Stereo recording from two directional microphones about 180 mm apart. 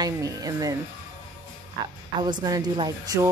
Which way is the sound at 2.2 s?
20° right (ahead or behind).